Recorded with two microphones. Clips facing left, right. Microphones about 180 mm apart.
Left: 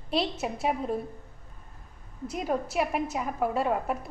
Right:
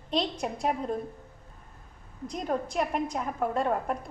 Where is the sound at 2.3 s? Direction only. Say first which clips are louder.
Left 1 dB; 5° left (ahead or behind).